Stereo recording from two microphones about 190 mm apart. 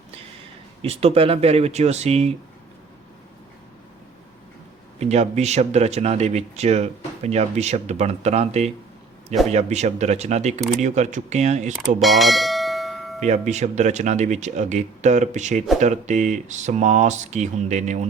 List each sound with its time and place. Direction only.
0.8 s speech: 30° right (ahead or behind)
4.9 s speech: 35° right (ahead or behind)
11.9 s bell: centre (ahead or behind)
13.1 s speech: 35° right (ahead or behind)